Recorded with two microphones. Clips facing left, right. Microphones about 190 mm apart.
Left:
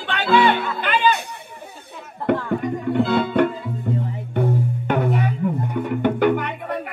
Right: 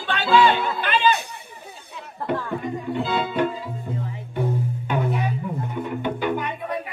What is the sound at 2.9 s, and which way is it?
Speech, 60° left (ahead or behind).